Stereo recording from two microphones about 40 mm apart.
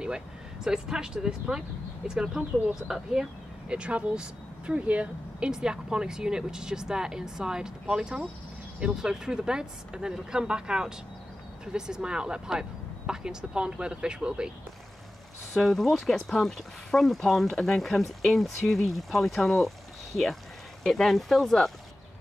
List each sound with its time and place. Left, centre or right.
0.7 s speech: centre
3.6 s speech: right
5.4 s speech: centre
15.5 s speech: centre
20.8 s speech: centre